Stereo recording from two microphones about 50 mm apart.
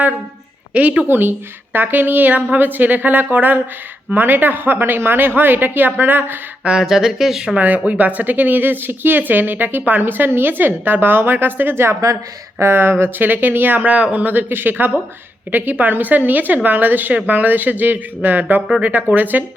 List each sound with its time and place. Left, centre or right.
0.7 s a woman's voice: right
1.0 s a woman's voice: right
6.8 s speech: centre
7.5 s a woman's voice: right